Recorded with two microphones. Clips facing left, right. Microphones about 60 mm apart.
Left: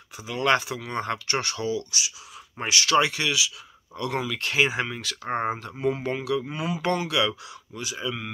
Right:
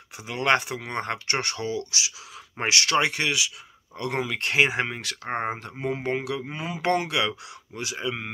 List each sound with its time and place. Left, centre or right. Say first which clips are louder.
0.3 s speech: even; right
2.9 s speech: left 5 dB; right
6.8 s speech: right 1 dB; right